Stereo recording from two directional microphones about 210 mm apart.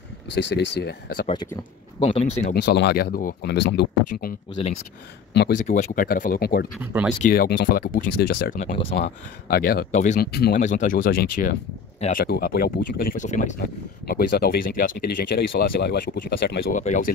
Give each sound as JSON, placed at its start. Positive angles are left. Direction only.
{"t": 0.3, "sound": "speech", "side_deg": 60}
{"t": 1.5, "sound": "speech", "side_deg": 25}
{"t": 2.0, "sound": "speech", "side_deg": 35}
{"t": 2.5, "sound": "speech", "side_deg": 50}
{"t": 3.5, "sound": "speech", "side_deg": 55}
{"t": 4.1, "sound": "speech", "side_deg": 35}
{"t": 5.3, "sound": "speech", "side_deg": 55}
{"t": 5.6, "sound": "speech", "side_deg": 35}
{"t": 6.8, "sound": "speech", "side_deg": -10}
{"t": 7.2, "sound": "speech", "side_deg": 45}
{"t": 9.9, "sound": "speech", "side_deg": 35}
{"t": 10.2, "sound": "speech", "side_deg": 50}
{"t": 16.7, "sound": "speech", "side_deg": 35}